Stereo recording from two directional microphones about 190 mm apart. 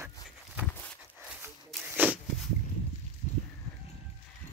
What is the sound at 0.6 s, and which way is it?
Walk, 10° left (ahead or behind).